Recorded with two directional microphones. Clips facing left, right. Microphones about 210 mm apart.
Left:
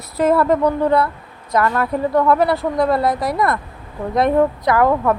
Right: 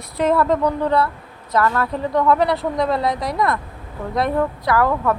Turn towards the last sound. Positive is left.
turn(degrees=20)  # may be behind; listen again after turning